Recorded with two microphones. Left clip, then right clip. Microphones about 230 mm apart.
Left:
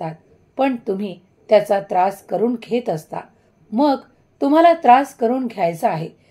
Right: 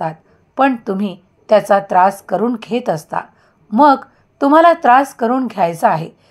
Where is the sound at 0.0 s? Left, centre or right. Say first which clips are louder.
Right 7 dB; right.